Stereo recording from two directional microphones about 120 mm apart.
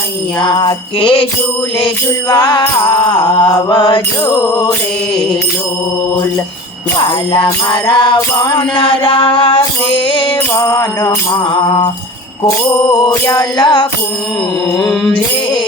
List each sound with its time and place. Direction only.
0.4 s jingle bell: 40° left (ahead or behind)
2.3 s mantra: 35° left (ahead or behind)
7.0 s jingle bell: 40° left (ahead or behind)
10.6 s music: 25° left (ahead or behind)
13.2 s mantra: 35° left (ahead or behind)
14.8 s music: centre (ahead or behind)